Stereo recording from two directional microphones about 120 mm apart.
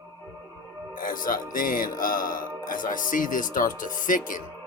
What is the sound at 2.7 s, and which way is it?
Speech, 90° left.